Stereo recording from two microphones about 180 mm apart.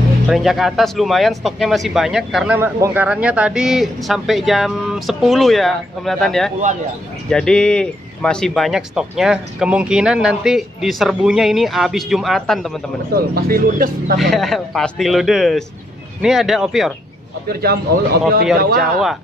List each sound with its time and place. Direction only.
0.3 s speech: centre (ahead or behind)
13.1 s speech: 55° right (ahead or behind)
14.1 s speech: centre (ahead or behind)
17.5 s speech: 60° right (ahead or behind)
18.8 s speech: centre (ahead or behind)